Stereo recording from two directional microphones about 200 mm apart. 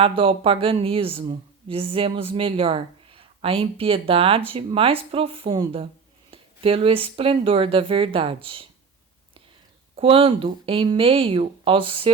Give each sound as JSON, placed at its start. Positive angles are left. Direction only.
{"t": 0.0, "sound": "speech", "side_deg": -25}
{"t": 9.9, "sound": "speech", "side_deg": -30}